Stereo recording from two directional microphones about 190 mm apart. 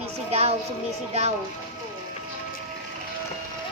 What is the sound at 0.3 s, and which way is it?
Speech, 35° right (ahead or behind).